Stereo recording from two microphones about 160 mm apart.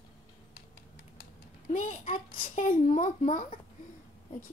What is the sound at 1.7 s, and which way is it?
Speech, 50° left (ahead or behind).